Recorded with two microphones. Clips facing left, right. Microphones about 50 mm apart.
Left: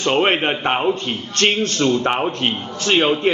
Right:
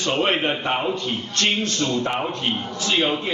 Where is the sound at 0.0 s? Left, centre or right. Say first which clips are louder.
Left 4 dB; left.